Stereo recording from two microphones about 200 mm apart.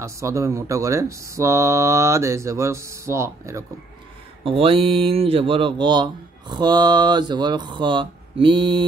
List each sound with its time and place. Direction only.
0.0 s speech: 15° right (ahead or behind)
4.5 s speech: 30° right (ahead or behind)